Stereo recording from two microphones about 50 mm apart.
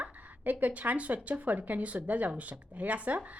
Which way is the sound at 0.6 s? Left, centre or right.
Right.